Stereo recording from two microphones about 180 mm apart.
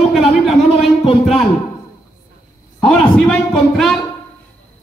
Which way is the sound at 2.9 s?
5° left (ahead or behind).